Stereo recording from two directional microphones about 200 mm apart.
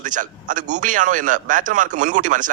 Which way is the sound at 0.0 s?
40° right (ahead or behind).